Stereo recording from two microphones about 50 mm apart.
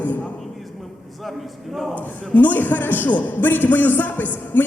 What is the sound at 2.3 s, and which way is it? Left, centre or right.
A man's voice, left.